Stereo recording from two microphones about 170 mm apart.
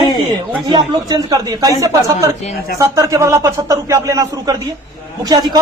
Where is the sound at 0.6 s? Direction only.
25° right (ahead or behind).